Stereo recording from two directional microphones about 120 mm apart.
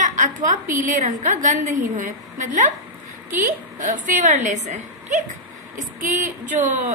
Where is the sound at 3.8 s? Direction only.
90° right.